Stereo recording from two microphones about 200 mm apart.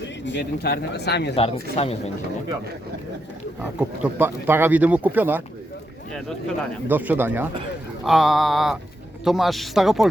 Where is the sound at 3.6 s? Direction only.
5° right (ahead or behind).